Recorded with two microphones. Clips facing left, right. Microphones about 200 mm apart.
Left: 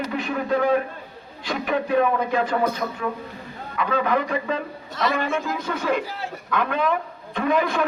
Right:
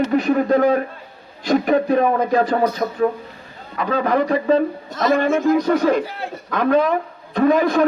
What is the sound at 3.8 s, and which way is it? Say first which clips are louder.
A man's voice: right 4 dB; 35° right (ahead or behind).